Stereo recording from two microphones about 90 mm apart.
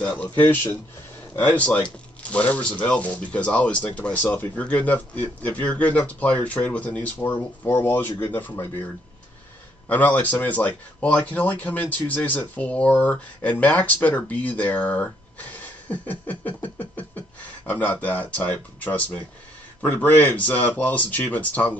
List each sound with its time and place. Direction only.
0.0 s speech: 15° left (ahead or behind)
1.3 s speech: 15° left (ahead or behind)
9.8 s speech: 20° left (ahead or behind)